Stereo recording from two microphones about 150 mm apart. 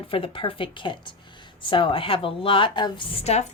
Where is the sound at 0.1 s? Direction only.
35° left (ahead or behind).